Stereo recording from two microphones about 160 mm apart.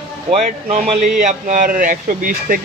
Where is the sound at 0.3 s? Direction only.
45° right (ahead or behind).